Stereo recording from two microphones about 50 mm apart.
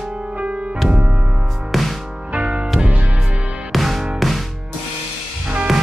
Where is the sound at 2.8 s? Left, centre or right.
Right.